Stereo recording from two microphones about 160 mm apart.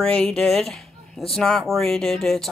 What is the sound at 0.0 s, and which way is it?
A woman's voice, 5° left (ahead or behind).